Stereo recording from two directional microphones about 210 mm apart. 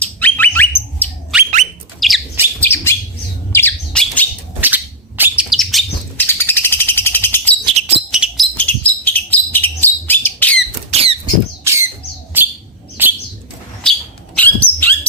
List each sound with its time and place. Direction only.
0.0 s squawk: 10° left (ahead or behind)
1.3 s bird: centre (ahead or behind)
2.6 s bird: 10° left (ahead or behind)
4.6 s bird: 10° right (ahead or behind); by 7.5 s 10° left (ahead or behind)
7.6 s a sound: 30° right (ahead or behind)
8.1 s bird: 5° right (ahead or behind)
8.5 s bird: 5° left (ahead or behind)
10.9 s rodents: 30° right (ahead or behind)
11.6 s rodents: 15° right (ahead or behind)
13.0 s bird: 10° right (ahead or behind)
14.3 s dog: 10° left (ahead or behind)